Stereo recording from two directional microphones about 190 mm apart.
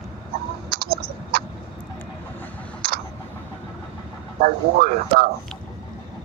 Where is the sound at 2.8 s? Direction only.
55° right (ahead or behind).